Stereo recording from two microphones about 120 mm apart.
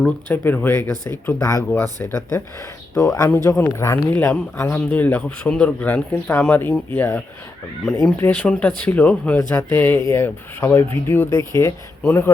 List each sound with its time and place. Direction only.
0.0 s speech: 15° left (ahead or behind)